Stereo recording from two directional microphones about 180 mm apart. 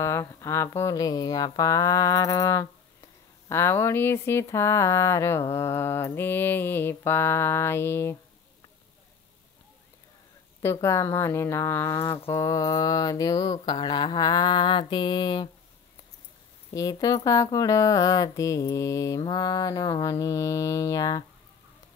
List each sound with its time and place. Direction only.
0.0 s speech: 15° left (ahead or behind)
10.6 s speech: 15° left (ahead or behind)
16.7 s speech: 20° left (ahead or behind)